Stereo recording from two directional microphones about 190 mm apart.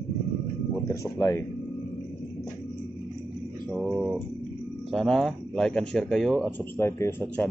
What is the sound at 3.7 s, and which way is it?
Speech, centre (ahead or behind).